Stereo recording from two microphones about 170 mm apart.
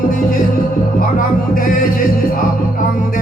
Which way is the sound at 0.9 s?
55° left (ahead or behind).